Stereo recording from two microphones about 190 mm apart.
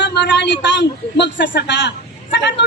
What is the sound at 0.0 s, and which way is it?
A man's voice, 65° left (ahead or behind).